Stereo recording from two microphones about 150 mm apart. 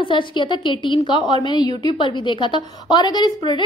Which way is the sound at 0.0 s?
35° left (ahead or behind).